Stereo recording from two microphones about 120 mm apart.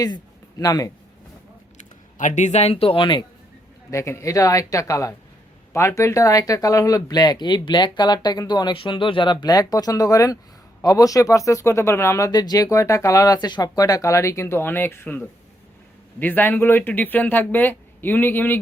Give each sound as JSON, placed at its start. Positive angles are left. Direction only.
{"t": 0.6, "sound": "speech", "side_deg": 30}
{"t": 2.1, "sound": "a man's voice", "side_deg": 90}
{"t": 3.9, "sound": "speech", "side_deg": 25}